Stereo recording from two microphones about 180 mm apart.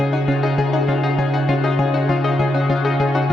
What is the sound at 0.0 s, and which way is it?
Music, centre (ahead or behind).